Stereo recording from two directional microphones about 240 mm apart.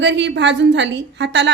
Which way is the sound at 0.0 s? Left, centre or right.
Right.